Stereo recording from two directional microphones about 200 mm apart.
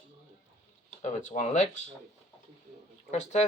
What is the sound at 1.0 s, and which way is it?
Speech, 35° left (ahead or behind).